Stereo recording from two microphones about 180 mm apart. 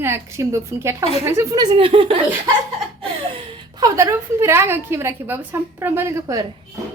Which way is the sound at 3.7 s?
20° right (ahead or behind).